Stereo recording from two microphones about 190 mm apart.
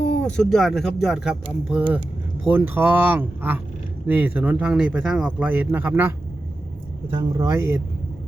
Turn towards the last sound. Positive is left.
turn(degrees=-15)  # may be behind; listen again after turning